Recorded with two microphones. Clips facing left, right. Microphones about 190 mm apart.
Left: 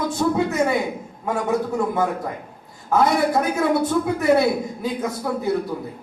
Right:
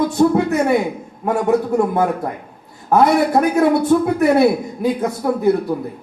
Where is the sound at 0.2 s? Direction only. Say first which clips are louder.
Right 5 dB; 55° right (ahead or behind).